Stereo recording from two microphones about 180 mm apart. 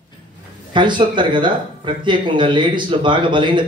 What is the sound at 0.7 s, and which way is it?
Speech, 25° right (ahead or behind).